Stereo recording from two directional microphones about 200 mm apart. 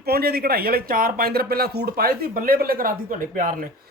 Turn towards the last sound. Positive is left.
turn(degrees=-45)  # may be behind; listen again after turning